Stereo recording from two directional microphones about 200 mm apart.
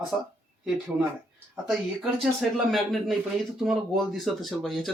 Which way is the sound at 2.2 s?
Centre (ahead or behind).